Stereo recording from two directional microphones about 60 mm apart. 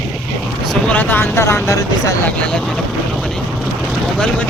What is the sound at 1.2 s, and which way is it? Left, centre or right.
Speech, left.